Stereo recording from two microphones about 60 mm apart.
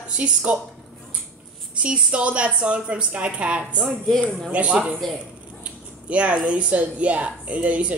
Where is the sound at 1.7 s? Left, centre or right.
Centre.